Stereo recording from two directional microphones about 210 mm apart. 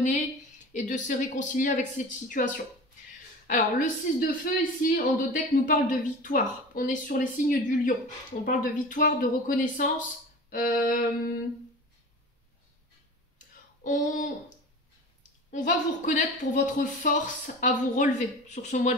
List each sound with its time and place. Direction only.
0.7 s speech: 35° left (ahead or behind)
13.8 s speech: 35° left (ahead or behind)
15.5 s speech: 35° left (ahead or behind)